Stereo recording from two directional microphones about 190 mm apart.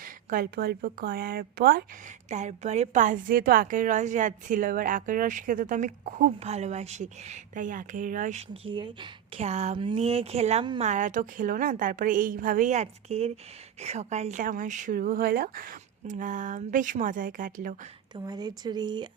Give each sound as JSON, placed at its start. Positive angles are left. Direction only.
{"t": 0.0, "sound": "speech", "side_deg": -50}
{"t": 2.3, "sound": "a woman's voice", "side_deg": -35}
{"t": 18.1, "sound": "speech", "side_deg": -20}